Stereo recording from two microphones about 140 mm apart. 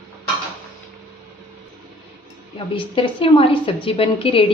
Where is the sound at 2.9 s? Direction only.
40° left (ahead or behind).